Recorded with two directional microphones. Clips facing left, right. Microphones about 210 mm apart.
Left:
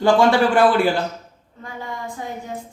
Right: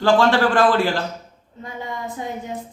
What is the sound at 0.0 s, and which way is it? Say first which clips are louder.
Speech: left 1 dB; 15° left (ahead or behind).